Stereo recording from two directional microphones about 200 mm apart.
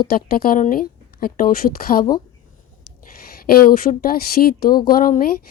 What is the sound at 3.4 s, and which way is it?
A woman's voice, 50° left (ahead or behind).